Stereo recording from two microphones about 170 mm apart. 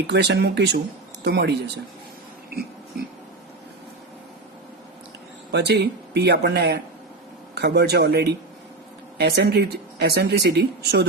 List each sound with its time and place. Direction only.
0.1 s speech: 75° right (ahead or behind)
5.5 s speech: 80° right